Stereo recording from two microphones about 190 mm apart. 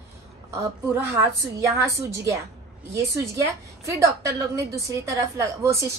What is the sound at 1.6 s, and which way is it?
A woman's voice, 15° right (ahead or behind).